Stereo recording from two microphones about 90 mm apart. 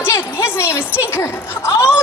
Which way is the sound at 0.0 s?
30° left (ahead or behind).